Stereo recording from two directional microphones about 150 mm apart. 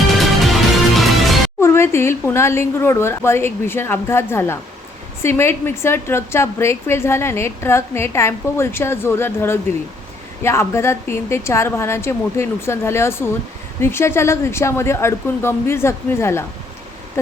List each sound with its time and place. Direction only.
0.2 s music: centre (ahead or behind)
1.6 s a woman's voice: 15° left (ahead or behind)